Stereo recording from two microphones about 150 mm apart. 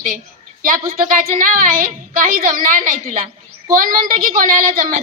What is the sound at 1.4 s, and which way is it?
A woman's voice, 65° right (ahead or behind).